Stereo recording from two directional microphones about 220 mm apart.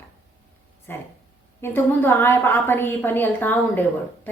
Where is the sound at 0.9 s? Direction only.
10° left (ahead or behind).